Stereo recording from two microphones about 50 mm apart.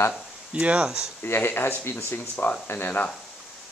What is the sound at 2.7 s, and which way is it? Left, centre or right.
Speech, left.